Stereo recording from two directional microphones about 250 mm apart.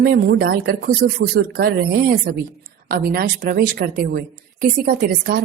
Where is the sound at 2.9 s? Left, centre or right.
Right.